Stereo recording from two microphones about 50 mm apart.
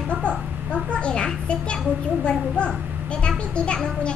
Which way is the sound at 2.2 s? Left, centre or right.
Left.